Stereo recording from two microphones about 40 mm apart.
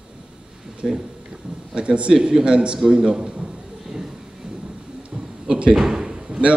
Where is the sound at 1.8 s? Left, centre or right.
Right.